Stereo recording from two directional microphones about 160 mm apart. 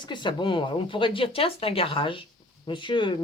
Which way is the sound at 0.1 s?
30° left (ahead or behind).